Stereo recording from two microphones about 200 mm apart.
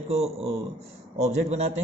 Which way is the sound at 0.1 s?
30° right (ahead or behind).